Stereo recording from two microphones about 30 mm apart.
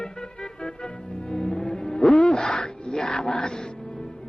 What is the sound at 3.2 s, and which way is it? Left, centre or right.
Music, left.